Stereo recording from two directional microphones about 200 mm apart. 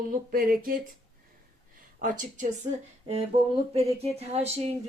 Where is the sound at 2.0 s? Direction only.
40° right (ahead or behind).